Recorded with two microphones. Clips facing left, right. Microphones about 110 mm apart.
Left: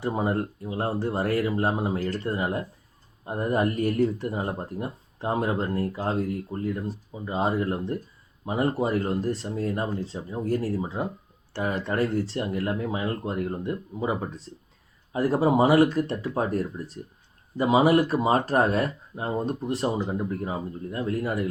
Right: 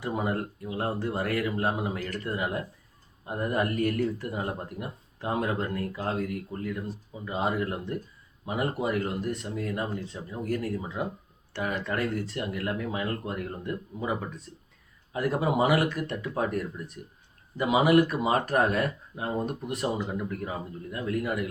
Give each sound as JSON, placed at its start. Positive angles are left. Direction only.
{"t": 0.0, "sound": "speech", "side_deg": 30}